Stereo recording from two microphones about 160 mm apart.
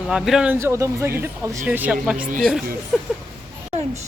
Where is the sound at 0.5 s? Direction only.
15° right (ahead or behind).